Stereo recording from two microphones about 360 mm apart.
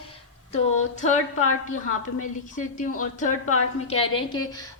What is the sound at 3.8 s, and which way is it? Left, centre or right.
Speech, centre.